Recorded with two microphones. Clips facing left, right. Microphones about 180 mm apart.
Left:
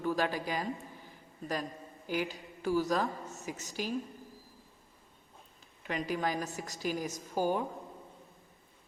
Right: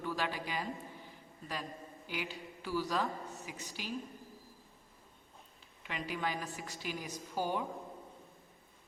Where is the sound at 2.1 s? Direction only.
45° left (ahead or behind).